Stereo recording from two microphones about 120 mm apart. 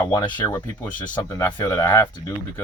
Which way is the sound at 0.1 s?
35° left (ahead or behind).